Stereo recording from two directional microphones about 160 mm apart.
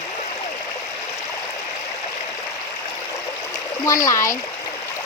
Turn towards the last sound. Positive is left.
turn(degrees=20)  # may be behind; listen again after turning